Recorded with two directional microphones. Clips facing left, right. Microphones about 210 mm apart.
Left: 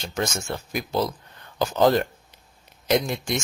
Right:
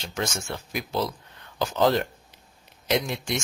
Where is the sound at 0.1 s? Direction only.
45° left (ahead or behind).